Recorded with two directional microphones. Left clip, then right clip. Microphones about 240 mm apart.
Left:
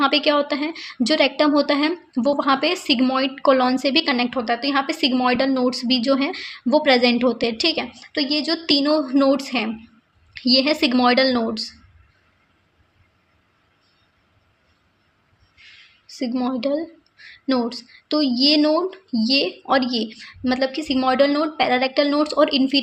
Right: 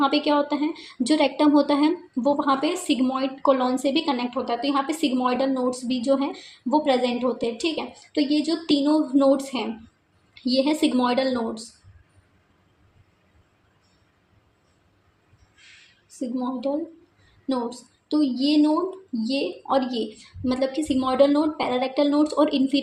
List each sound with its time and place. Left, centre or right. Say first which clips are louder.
0.0 s a woman's voice: left 3 dB; left
16.0 s a woman's voice: left 5 dB; left